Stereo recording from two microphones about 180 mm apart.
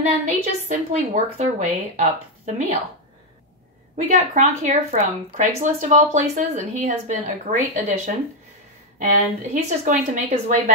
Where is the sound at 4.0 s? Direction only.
45° right (ahead or behind).